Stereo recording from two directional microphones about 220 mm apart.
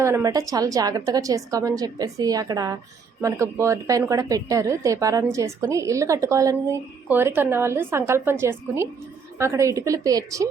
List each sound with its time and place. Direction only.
0.0 s a woman's voice: 15° right (ahead or behind)